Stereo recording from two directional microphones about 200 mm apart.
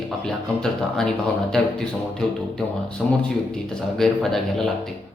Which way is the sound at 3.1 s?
5° left (ahead or behind).